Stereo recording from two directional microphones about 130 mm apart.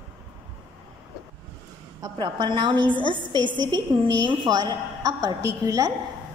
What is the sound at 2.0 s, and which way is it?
A woman's voice, 35° right (ahead or behind).